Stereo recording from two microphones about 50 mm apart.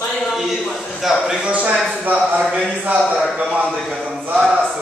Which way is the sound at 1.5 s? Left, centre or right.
Right.